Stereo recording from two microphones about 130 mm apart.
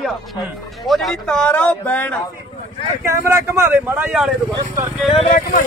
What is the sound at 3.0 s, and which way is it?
Speech, 20° right (ahead or behind).